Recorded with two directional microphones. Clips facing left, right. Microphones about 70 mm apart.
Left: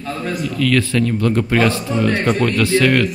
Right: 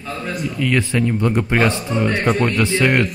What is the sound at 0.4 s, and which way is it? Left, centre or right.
Speech, centre.